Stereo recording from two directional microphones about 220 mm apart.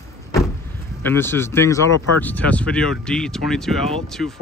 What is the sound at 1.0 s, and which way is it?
Speech, 10° left (ahead or behind).